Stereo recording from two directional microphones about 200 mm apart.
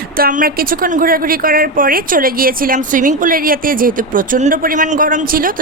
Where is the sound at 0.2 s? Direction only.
45° right (ahead or behind).